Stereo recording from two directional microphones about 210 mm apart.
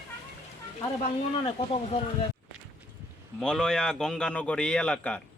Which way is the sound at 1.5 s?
30° left (ahead or behind).